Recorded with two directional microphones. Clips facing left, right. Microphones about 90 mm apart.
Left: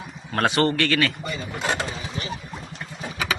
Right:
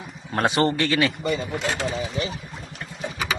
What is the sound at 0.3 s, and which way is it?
Speech, 20° right (ahead or behind).